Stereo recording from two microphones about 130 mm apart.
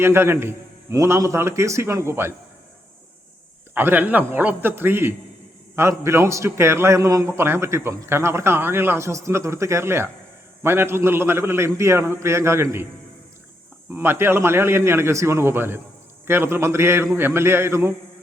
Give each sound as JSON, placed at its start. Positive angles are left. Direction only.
{"t": 0.0, "sound": "a man's voice", "side_deg": -20}
{"t": 3.8, "sound": "a man's voice", "side_deg": -15}
{"t": 13.9, "sound": "a man's voice", "side_deg": -15}